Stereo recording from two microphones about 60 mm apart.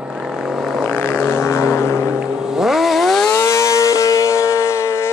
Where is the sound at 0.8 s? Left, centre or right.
Left.